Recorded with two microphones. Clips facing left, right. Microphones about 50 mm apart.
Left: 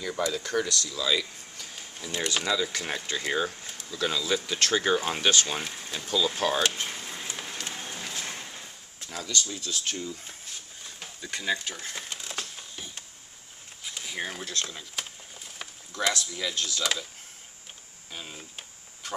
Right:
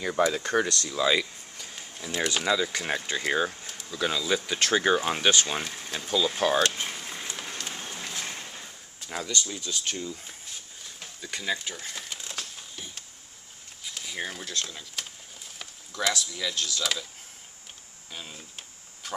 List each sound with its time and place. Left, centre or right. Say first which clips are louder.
0.1 s speech: right 4 dB; right
1.5 s speech: right 1 dB; centre
5.6 s speech: even; centre
5.9 s speech: right 1 dB; centre
6.7 s a sound: even; centre
9.2 s speech: left 1 dB; right
9.5 s speech: even; centre
10.8 s a sound: left 1 dB; centre
13.8 s speech: even; centre
18.1 s speech: left 1 dB; centre